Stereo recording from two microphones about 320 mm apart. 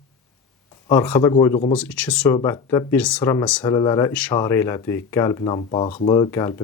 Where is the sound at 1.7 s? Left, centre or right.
Centre.